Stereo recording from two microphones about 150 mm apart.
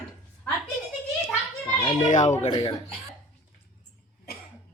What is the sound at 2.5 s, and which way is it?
Speech, 30° left (ahead or behind).